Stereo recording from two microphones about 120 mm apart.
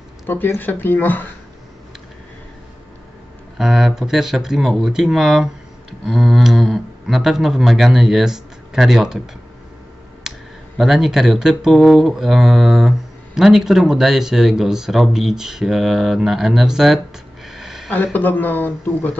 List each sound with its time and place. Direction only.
0.3 s speech: 15° left (ahead or behind)
3.5 s speech: centre (ahead or behind)
10.3 s clicking: 5° right (ahead or behind)
10.8 s speech: centre (ahead or behind)
17.5 s a sound: 5° right (ahead or behind)
17.9 s speech: 15° left (ahead or behind)